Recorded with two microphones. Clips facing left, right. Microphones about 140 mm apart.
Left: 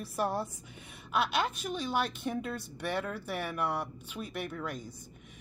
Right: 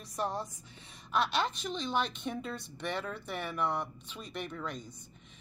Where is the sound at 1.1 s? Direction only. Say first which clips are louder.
Left 1 dB; 5° left (ahead or behind).